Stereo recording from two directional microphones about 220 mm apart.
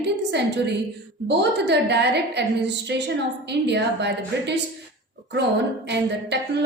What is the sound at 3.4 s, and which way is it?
A woman's voice, 50° right (ahead or behind).